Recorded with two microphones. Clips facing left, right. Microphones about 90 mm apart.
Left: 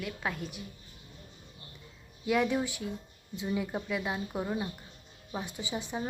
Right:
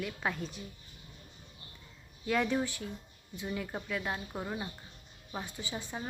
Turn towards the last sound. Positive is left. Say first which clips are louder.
# left 4 dB
turn(degrees=20)  # may be behind; listen again after turning